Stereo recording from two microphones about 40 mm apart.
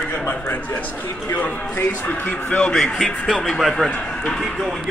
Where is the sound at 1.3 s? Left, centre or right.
Left.